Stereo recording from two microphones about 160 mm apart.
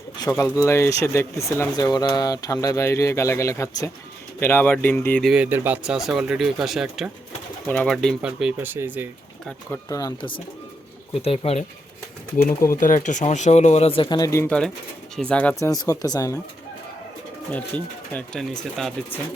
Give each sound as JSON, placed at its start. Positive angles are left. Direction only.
{"t": 0.3, "sound": "speech", "side_deg": 20}
{"t": 5.3, "sound": "speech", "side_deg": -10}
{"t": 7.7, "sound": "speech", "side_deg": 5}
{"t": 9.5, "sound": "speech", "side_deg": 10}
{"t": 12.4, "sound": "speech", "side_deg": 60}
{"t": 14.4, "sound": "speech", "side_deg": 5}
{"t": 17.5, "sound": "speech", "side_deg": 10}